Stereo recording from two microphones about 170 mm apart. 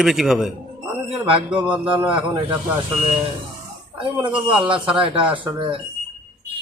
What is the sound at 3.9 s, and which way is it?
Speech, 30° right (ahead or behind).